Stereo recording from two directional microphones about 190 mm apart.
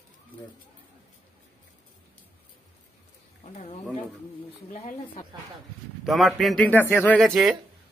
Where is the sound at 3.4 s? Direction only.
40° left (ahead or behind).